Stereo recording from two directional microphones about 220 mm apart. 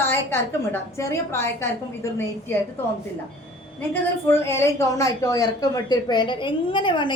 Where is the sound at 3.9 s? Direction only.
10° left (ahead or behind).